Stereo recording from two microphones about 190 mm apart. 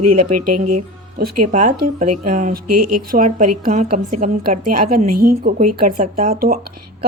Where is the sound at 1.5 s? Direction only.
35° right (ahead or behind).